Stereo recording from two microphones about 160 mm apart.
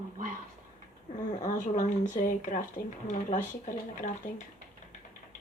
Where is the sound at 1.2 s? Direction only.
50° left (ahead or behind).